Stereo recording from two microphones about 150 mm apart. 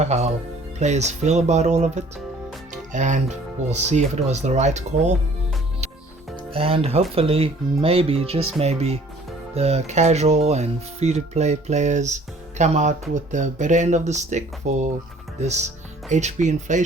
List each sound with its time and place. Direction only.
0.0 s speech: 45° right (ahead or behind)
6.5 s speech: 40° right (ahead or behind)
16.0 s speech: 50° right (ahead or behind)